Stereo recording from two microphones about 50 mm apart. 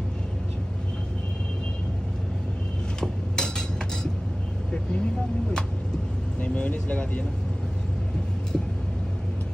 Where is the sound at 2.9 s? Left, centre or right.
Centre.